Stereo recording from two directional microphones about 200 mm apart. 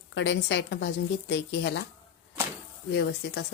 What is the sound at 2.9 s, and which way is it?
Speech, 60° left (ahead or behind).